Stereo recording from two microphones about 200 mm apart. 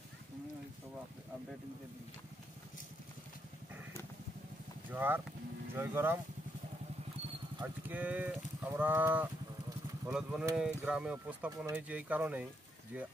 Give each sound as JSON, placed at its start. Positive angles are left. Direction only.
{"t": 4.9, "sound": "speech", "side_deg": -10}
{"t": 7.6, "sound": "speech", "side_deg": -10}